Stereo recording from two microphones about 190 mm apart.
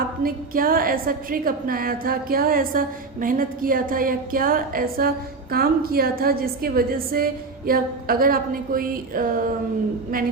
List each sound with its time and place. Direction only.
0.2 s a woman's voice: 50° right (ahead or behind)